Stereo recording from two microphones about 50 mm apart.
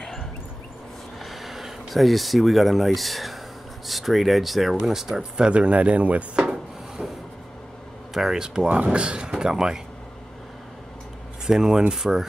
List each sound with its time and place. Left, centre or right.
1.2 s speech: centre
5.5 s speech: right
7.0 s printer: centre
8.1 s speech: centre
11.4 s speech: centre